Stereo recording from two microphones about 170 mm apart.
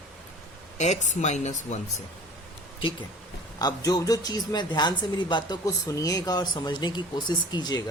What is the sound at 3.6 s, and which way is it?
A woman's voice, 25° left (ahead or behind).